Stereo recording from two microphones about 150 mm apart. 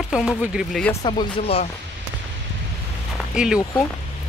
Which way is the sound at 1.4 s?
40° left (ahead or behind).